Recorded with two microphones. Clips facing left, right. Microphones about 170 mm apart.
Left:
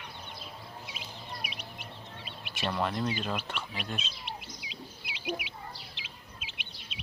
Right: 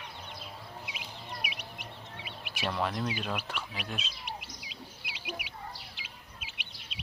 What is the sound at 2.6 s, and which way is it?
Speech, centre (ahead or behind).